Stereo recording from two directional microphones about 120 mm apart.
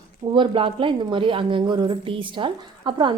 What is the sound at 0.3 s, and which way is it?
A woman's voice, 50° right (ahead or behind).